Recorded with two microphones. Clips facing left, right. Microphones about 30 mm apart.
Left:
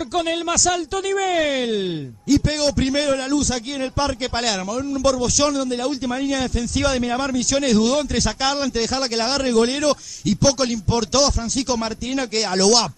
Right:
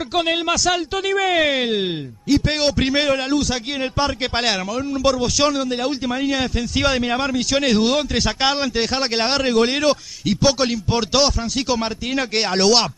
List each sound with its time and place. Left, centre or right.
0.1 s a man's voice: right
5.0 s a man's voice: right